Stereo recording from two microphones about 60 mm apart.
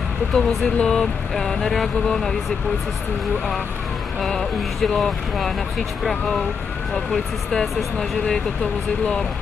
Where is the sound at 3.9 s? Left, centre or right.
Centre.